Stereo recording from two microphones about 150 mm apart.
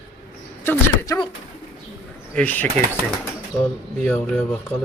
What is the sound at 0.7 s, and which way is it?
Speech, 15° left (ahead or behind).